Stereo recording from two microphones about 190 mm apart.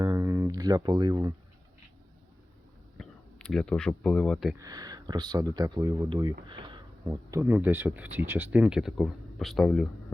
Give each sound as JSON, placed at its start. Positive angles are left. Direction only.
{"t": 0.0, "sound": "a sound", "side_deg": -20}
{"t": 3.0, "sound": "speech", "side_deg": 5}
{"t": 4.5, "sound": "speech", "side_deg": -20}